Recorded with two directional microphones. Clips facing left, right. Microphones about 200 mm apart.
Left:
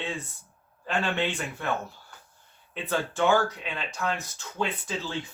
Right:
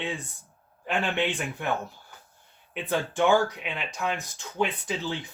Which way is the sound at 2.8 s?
15° right (ahead or behind).